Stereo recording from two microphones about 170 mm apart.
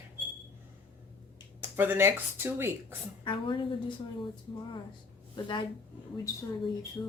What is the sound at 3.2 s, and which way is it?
Speech, 30° left (ahead or behind).